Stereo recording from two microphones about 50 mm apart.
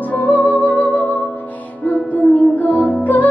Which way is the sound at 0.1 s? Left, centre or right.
Left.